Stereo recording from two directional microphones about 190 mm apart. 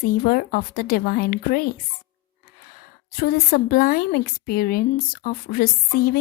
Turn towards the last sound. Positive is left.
turn(degrees=50)  # may be behind; listen again after turning